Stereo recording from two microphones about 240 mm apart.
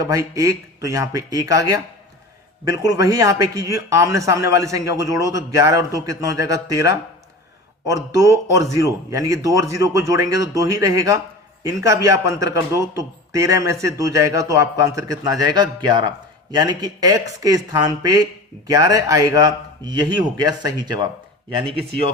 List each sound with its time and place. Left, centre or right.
0.0 s a man's voice: centre
8.1 s a man's voice: centre